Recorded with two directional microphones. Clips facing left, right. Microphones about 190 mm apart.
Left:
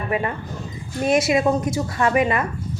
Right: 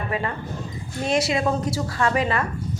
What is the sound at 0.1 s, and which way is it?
A woman's voice, 20° left (ahead or behind).